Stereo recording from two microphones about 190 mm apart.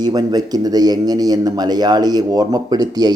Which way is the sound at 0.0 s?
20° right (ahead or behind).